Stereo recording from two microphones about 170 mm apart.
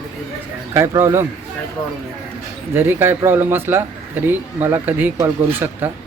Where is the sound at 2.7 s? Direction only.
10° right (ahead or behind).